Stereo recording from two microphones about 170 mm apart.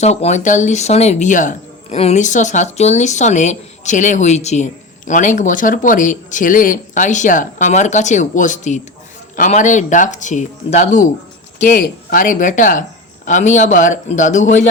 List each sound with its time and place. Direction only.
0.0 s speech: 40° left (ahead or behind)